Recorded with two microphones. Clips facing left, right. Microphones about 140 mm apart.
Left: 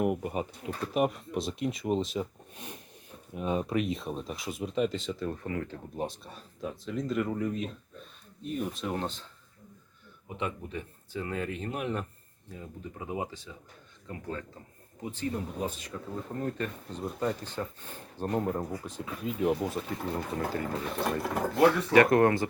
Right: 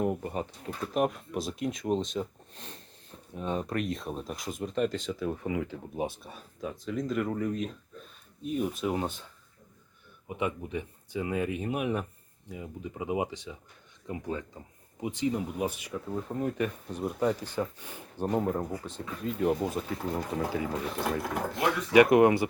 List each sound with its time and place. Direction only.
0.0 s speech: 15° left (ahead or behind)
0.8 s speech: centre (ahead or behind)
10.2 s speech: 15° right (ahead or behind)
21.9 s speech: 15° right (ahead or behind)